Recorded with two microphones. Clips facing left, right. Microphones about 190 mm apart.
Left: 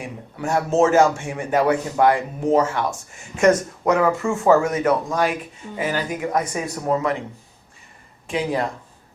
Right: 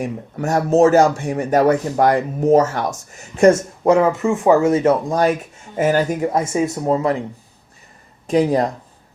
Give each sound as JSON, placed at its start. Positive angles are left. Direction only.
{"t": 0.0, "sound": "speech", "side_deg": -40}
{"t": 5.7, "sound": "speech", "side_deg": -45}
{"t": 6.3, "sound": "speech", "side_deg": -25}
{"t": 8.3, "sound": "speech", "side_deg": -40}